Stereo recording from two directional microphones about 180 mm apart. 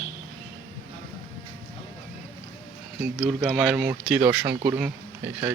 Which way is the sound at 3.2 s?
Centre (ahead or behind).